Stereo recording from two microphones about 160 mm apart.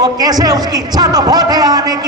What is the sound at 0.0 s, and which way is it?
A man's voice, 25° right (ahead or behind).